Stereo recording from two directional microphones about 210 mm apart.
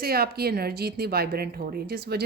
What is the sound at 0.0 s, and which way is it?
Speech, 45° right (ahead or behind).